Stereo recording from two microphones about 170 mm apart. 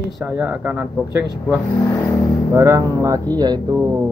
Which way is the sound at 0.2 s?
10° right (ahead or behind).